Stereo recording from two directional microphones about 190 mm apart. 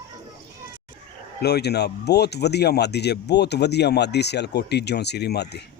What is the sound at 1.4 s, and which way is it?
Speech, 60° left (ahead or behind).